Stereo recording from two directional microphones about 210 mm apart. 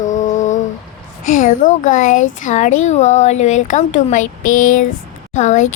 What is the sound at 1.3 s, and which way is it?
Speech, 40° left (ahead or behind).